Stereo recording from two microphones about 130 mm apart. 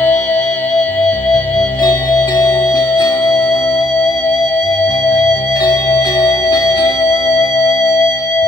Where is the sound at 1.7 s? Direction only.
30° left (ahead or behind).